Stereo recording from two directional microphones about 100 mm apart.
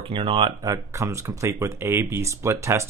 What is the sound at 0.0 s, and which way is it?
Speech, 65° right (ahead or behind).